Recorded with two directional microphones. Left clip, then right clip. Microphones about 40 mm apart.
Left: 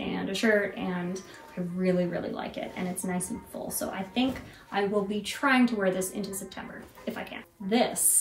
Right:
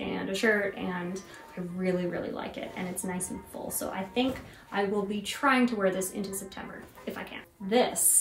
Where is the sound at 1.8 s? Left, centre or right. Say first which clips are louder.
Left 2 dB; centre.